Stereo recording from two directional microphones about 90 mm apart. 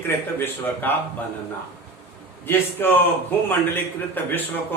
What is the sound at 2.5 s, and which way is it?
Speech, 25° left (ahead or behind).